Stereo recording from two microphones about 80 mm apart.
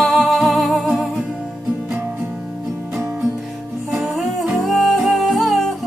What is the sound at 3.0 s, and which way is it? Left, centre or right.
Music, centre.